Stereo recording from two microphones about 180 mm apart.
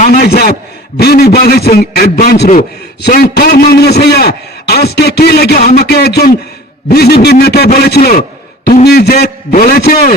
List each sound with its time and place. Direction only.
0.0 s a man's voice: 55° left (ahead or behind)